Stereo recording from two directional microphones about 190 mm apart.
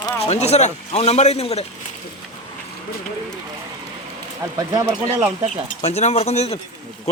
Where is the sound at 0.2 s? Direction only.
35° left (ahead or behind).